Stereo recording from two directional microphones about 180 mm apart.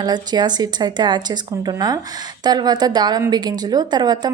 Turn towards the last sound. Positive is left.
turn(degrees=-25)  # may be behind; listen again after turning